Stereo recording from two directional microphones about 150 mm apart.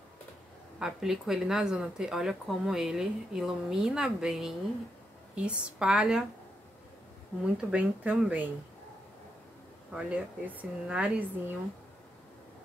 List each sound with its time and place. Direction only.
0.7 s speech: 5° right (ahead or behind)
7.3 s speech: 10° left (ahead or behind)
7.7 s speech: 10° right (ahead or behind)
9.9 s speech: 10° right (ahead or behind)